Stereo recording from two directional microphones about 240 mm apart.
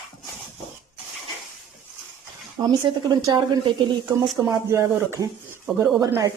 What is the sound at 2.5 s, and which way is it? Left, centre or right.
A woman's voice, centre.